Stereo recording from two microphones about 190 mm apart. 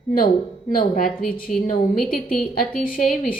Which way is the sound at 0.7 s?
50° left (ahead or behind).